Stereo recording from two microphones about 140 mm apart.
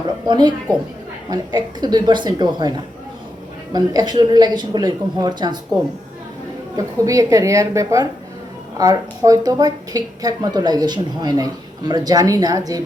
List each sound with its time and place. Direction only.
0.3 s a woman's voice: 30° right (ahead or behind)
6.7 s a woman's voice: 25° right (ahead or behind)